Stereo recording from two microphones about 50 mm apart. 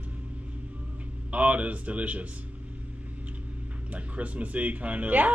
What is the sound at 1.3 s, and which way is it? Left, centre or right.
Speech, right.